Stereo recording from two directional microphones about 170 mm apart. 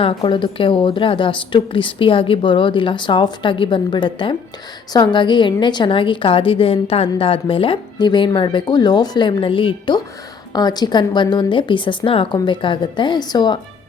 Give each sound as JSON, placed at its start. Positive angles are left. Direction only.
{"t": 0.0, "sound": "a woman's voice", "side_deg": 30}